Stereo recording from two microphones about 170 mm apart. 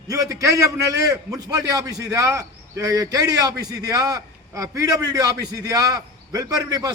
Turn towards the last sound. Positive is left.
turn(degrees=-25)  # may be behind; listen again after turning